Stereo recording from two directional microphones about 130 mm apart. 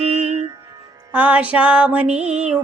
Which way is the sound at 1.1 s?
10° right (ahead or behind).